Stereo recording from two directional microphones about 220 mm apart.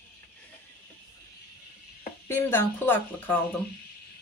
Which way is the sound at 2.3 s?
10° left (ahead or behind).